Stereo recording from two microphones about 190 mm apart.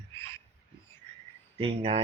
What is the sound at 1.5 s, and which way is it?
Speech, 30° right (ahead or behind).